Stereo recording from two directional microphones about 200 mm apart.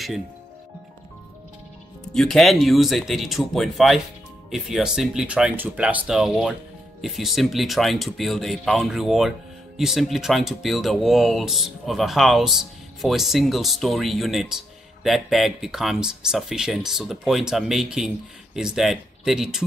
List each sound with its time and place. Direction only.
2.1 s speech: centre (ahead or behind)